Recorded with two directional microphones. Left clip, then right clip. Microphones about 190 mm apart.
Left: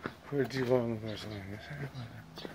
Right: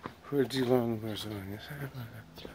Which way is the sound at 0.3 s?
35° right (ahead or behind).